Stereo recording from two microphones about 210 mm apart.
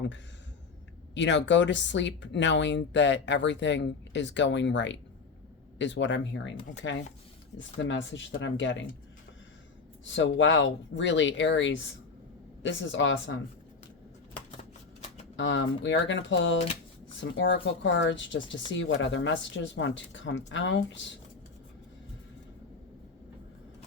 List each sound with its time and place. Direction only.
1.1 s speech: 60° left (ahead or behind)
10.0 s speech: 60° left (ahead or behind)
15.4 s speech: 65° left (ahead or behind)